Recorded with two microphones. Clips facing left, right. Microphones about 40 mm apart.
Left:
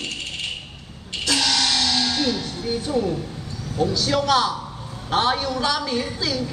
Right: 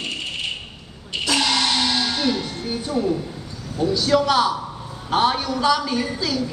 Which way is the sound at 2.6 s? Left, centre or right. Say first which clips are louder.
Left 1 dB; centre.